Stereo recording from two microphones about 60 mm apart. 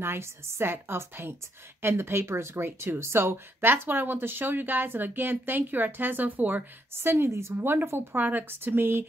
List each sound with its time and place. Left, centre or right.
0.0 s speech: right
7.0 s a woman's voice: right